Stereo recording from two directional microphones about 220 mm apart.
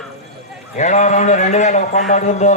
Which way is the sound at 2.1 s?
35° left (ahead or behind).